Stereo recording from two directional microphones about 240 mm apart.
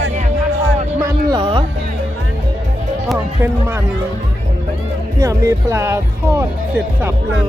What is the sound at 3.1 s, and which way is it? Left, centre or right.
Speech, centre.